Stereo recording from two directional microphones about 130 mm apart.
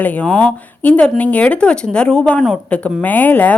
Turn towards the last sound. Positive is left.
turn(degrees=15)  # may be behind; listen again after turning